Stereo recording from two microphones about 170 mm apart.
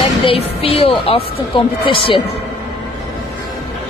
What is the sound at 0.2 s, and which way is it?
Speech, 35° left (ahead or behind).